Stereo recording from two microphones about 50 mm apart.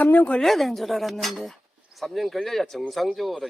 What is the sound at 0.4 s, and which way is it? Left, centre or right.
Speech, centre.